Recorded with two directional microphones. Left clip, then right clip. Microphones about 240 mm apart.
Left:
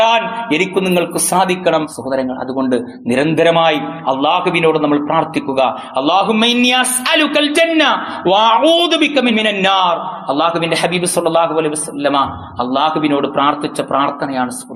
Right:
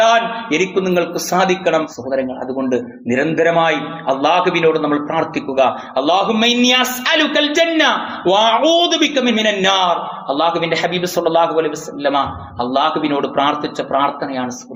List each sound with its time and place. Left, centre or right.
0.0 s a man's voice: left